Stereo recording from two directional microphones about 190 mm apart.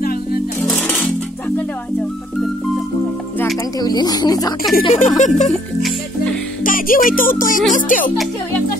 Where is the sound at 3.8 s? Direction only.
20° left (ahead or behind).